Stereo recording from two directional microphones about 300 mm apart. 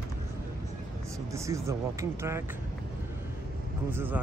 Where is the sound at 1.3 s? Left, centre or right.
Centre.